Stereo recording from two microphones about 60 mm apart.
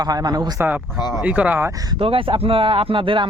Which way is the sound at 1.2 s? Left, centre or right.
Right.